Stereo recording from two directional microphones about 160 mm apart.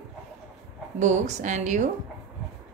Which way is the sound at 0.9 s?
50° right (ahead or behind).